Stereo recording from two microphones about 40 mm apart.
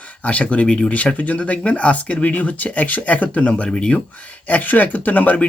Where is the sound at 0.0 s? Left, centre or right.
Left.